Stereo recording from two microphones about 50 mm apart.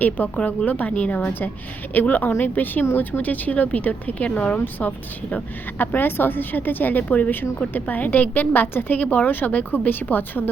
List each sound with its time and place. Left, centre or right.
0.4 s a woman's voice: left